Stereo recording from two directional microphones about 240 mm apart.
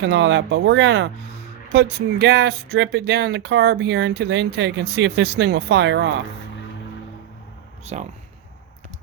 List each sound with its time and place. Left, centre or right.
0.0 s speech: right
7.9 s speech: right